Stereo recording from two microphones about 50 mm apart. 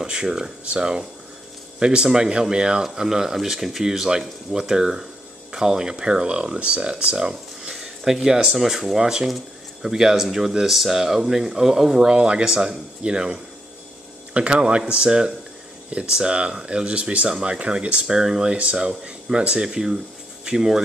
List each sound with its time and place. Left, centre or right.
0.0 s speech: centre
18.0 s speech: centre